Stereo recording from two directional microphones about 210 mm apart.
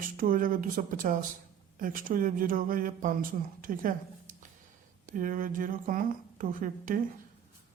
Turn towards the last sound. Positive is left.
turn(degrees=-40)  # may be behind; listen again after turning